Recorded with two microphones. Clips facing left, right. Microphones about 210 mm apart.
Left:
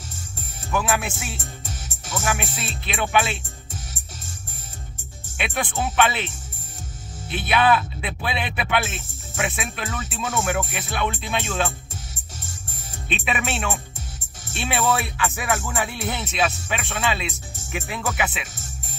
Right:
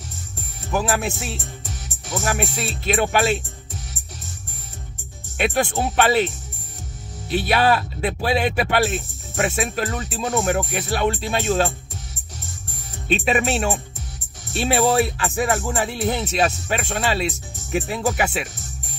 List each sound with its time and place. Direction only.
0.7 s speech: 35° right (ahead or behind)
2.4 s speech: 45° right (ahead or behind)
5.4 s speech: 40° right (ahead or behind)
7.2 s speech: 40° right (ahead or behind)
13.1 s speech: 40° right (ahead or behind)